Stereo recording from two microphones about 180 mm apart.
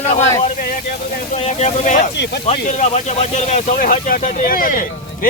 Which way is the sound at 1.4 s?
40° left (ahead or behind).